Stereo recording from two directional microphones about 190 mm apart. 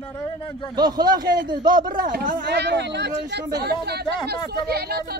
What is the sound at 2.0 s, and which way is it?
A man's voice, 45° right (ahead or behind).